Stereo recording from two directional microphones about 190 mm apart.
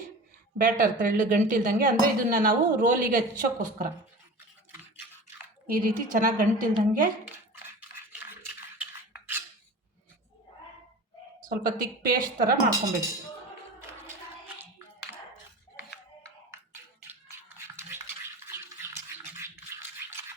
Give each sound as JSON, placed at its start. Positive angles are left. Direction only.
{"t": 0.6, "sound": "speech", "side_deg": -45}
{"t": 5.6, "sound": "speech", "side_deg": -45}
{"t": 7.3, "sound": "bathtub", "side_deg": -10}
{"t": 8.4, "sound": "cutlery", "side_deg": -10}
{"t": 11.3, "sound": "speech", "side_deg": -45}
{"t": 17.1, "sound": "a sound", "side_deg": -10}
{"t": 19.4, "sound": "a sound", "side_deg": -15}